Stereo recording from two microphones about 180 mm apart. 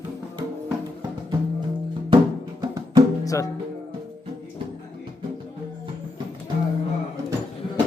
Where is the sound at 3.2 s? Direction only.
20° left (ahead or behind).